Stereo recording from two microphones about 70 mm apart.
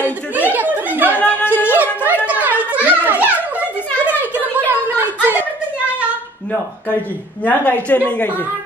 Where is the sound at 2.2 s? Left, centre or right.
Right.